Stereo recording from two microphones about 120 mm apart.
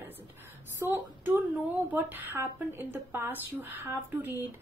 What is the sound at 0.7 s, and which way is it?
A woman's voice, 20° right (ahead or behind).